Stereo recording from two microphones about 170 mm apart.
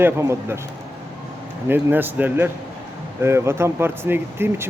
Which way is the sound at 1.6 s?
10° right (ahead or behind).